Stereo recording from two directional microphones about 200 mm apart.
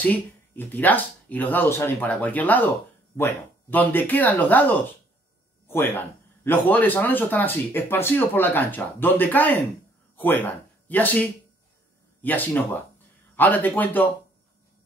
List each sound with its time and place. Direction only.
0.0 s speech: 10° left (ahead or behind)